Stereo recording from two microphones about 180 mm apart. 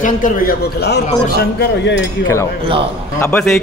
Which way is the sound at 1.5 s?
80° left.